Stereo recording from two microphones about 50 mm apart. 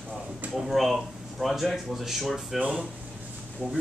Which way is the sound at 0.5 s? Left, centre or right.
Centre.